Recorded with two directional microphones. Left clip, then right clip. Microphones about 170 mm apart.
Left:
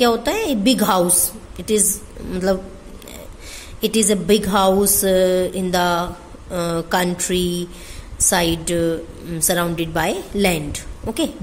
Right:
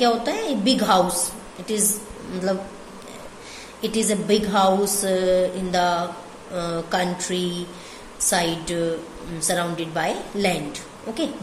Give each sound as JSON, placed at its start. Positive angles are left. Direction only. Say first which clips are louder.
{"t": 0.0, "sound": "a woman's voice", "louder": "left 3 dB", "side_deg": 55}
{"t": 3.8, "sound": "a woman's voice", "louder": "left 5 dB", "side_deg": 55}